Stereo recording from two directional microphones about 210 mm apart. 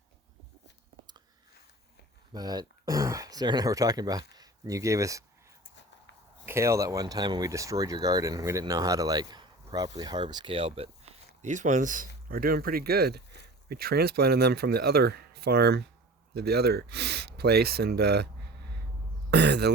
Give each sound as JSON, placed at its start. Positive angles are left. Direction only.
{"t": 2.3, "sound": "speech", "side_deg": -20}
{"t": 6.4, "sound": "speech", "side_deg": -10}
{"t": 19.3, "sound": "throat clearing", "side_deg": -50}